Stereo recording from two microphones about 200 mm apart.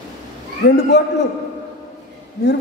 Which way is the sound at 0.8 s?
55° left (ahead or behind).